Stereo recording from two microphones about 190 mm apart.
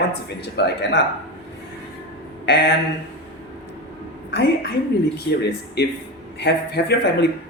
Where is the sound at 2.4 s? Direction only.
60° left (ahead or behind).